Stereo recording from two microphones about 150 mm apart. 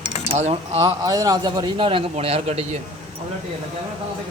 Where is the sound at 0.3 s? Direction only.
50° right (ahead or behind).